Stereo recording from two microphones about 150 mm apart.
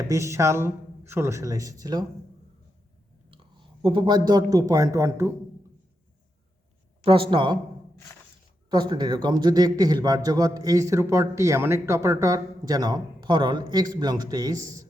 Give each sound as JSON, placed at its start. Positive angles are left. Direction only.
{"t": 0.1, "sound": "a man's voice", "side_deg": -20}
{"t": 3.2, "sound": "speech", "side_deg": -35}
{"t": 7.0, "sound": "speech", "side_deg": -35}
{"t": 8.7, "sound": "a man's voice", "side_deg": -30}